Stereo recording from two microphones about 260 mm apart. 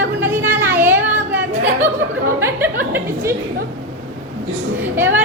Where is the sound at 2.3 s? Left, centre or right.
Centre.